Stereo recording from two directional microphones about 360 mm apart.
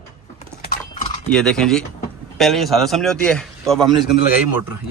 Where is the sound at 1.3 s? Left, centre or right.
Centre.